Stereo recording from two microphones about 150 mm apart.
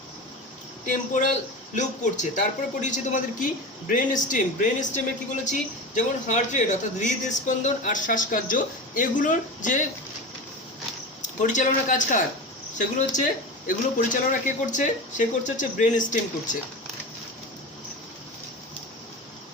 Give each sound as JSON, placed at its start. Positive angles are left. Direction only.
{"t": 0.9, "sound": "a man's voice", "side_deg": 55}
{"t": 11.2, "sound": "a man's voice", "side_deg": 55}